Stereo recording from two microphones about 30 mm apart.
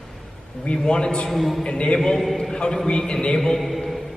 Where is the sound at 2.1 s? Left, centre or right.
Centre.